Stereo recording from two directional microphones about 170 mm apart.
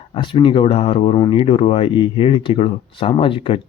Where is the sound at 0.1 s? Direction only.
30° left (ahead or behind).